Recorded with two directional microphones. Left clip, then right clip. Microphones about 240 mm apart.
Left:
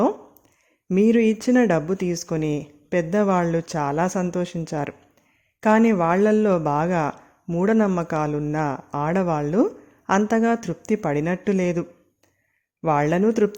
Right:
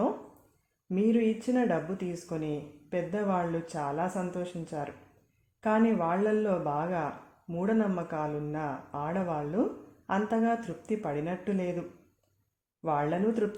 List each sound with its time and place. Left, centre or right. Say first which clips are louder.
0.9 s speech: left 9 dB; left